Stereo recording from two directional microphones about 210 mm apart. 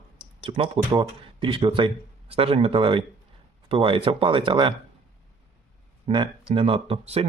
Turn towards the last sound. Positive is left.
turn(degrees=-30)  # may be behind; listen again after turning